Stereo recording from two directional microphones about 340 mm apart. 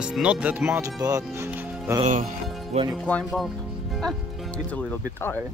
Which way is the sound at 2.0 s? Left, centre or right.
Right.